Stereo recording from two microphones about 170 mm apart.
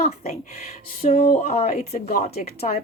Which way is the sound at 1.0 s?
60° left (ahead or behind).